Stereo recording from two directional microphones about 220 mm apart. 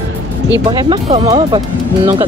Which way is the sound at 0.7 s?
20° right (ahead or behind).